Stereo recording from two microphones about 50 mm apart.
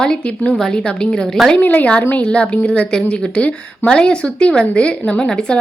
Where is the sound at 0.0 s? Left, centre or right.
Centre.